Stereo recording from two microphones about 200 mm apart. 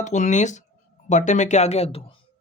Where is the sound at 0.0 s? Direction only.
35° left (ahead or behind).